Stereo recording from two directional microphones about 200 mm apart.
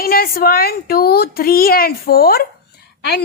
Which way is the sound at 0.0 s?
45° left (ahead or behind).